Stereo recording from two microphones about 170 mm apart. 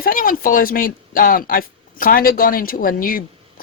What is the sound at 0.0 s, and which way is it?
A woman's voice, 55° left (ahead or behind).